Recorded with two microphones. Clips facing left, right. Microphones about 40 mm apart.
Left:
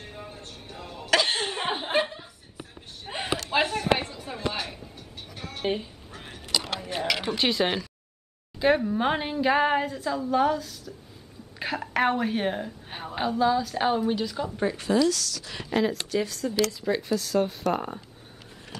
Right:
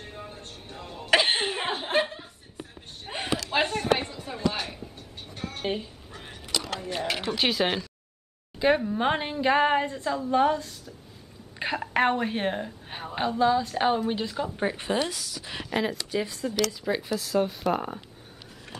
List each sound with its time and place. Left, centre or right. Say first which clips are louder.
0.0 s a sound: even; centre
1.1 s cough: right 1 dB; centre
1.7 s chuckle: left 2 dB; centre
3.5 s a sound: left 1 dB; centre
7.3 s a woman's voice: right 1 dB; centre
14.6 s speech: left 5 dB; right
15.6 s a woman's voice: left 3 dB; centre